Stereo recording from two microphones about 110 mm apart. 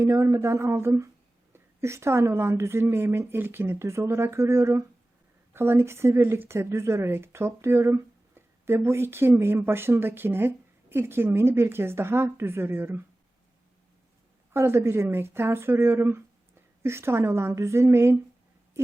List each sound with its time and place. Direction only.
0.0 s a woman's voice: 25° right (ahead or behind)
14.5 s speech: 20° right (ahead or behind)